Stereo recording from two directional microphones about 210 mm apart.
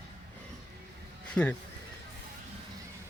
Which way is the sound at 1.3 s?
5° left (ahead or behind).